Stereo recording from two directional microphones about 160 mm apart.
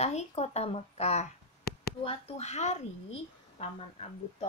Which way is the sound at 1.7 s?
75° left (ahead or behind).